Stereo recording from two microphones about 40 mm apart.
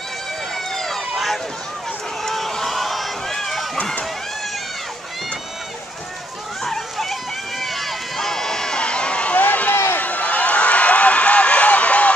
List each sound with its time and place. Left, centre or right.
0.7 s run: centre
6.6 s run: centre; by 9.8 s left
9.9 s a sound: left